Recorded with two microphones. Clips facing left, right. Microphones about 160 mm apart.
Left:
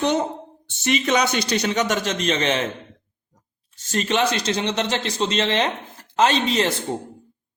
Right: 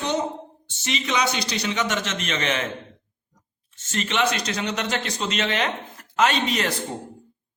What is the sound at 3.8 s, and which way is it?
Speech, 35° left (ahead or behind).